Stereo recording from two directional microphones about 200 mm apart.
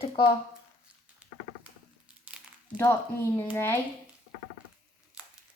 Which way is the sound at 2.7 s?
10° left (ahead or behind).